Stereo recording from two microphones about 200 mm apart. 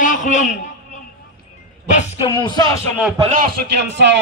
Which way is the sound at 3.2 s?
40° right (ahead or behind).